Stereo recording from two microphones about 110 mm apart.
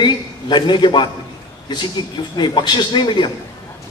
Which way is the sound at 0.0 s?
45° left (ahead or behind).